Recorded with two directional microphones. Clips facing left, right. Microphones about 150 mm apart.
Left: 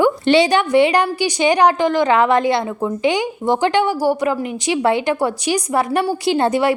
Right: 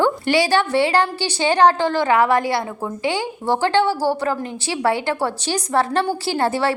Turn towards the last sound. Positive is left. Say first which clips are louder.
# left 4 dB
turn(degrees=20)  # may be behind; listen again after turning